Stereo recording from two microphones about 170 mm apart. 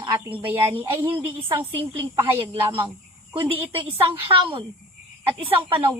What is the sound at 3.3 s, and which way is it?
A woman's voice, 35° right (ahead or behind).